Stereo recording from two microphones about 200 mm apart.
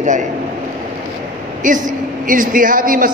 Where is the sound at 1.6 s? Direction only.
40° right (ahead or behind).